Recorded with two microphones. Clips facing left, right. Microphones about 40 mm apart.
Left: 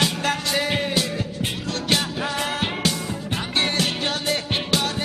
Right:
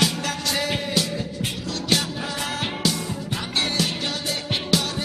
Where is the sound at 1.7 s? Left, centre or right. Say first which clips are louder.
Even; left.